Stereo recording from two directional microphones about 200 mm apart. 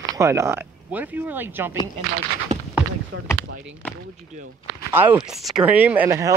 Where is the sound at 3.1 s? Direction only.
90° right.